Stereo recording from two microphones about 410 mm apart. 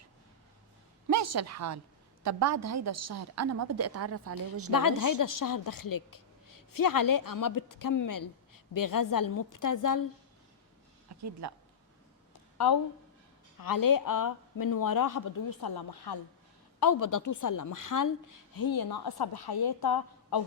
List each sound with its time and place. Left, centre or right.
1.1 s a woman's voice: right
4.7 s a woman's voice: left
12.5 s a woman's voice: left
16.8 s a woman's voice: left